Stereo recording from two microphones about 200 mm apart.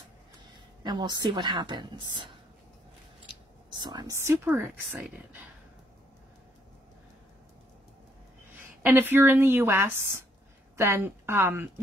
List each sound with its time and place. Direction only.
0.8 s a woman's voice: 20° right (ahead or behind)
3.8 s speech: 20° right (ahead or behind)
8.6 s speech: 10° right (ahead or behind)